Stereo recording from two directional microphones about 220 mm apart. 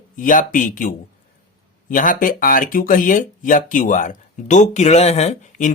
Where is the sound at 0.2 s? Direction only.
35° left (ahead or behind).